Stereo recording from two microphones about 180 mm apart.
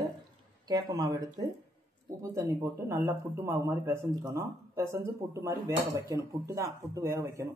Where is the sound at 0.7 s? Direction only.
20° right (ahead or behind).